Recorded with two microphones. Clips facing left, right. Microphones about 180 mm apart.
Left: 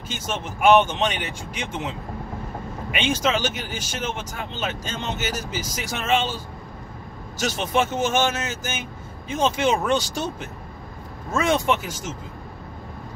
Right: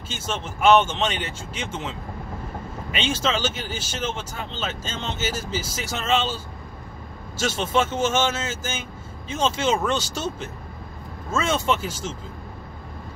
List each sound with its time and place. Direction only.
0.1 s speech: 15° left (ahead or behind)